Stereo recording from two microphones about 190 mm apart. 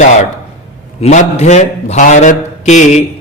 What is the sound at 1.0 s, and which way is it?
A man's voice, 35° left (ahead or behind).